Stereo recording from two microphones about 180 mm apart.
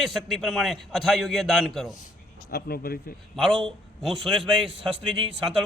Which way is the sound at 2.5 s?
60° left (ahead or behind).